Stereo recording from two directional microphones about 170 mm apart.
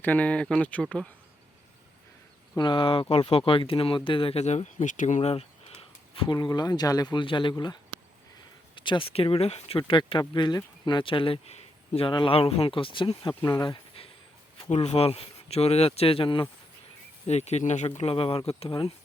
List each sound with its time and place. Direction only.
0.0 s speech: 10° left (ahead or behind)
2.6 s speech: 30° left (ahead or behind)